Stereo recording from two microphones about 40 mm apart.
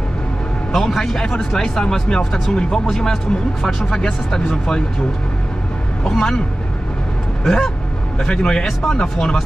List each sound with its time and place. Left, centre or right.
0.7 s speech: centre
6.0 s speech: centre
7.4 s speech: centre